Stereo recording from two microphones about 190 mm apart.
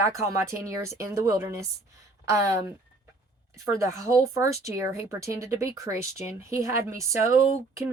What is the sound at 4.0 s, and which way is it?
Speech, 15° right (ahead or behind).